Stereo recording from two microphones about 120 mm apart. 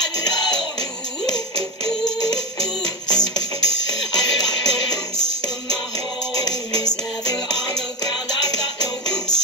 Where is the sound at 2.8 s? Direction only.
35° left (ahead or behind).